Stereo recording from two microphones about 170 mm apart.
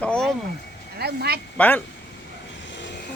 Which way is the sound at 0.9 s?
70° right (ahead or behind).